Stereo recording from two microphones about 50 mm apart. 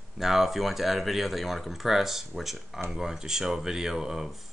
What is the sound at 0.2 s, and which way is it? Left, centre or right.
Speech, centre.